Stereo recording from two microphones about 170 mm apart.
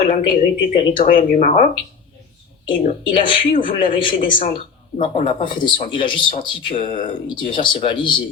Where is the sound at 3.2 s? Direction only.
30° left (ahead or behind).